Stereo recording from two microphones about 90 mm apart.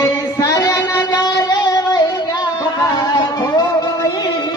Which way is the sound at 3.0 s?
50° left (ahead or behind).